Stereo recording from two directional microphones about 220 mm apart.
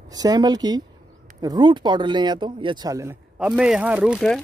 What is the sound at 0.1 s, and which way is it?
Speech, 15° right (ahead or behind).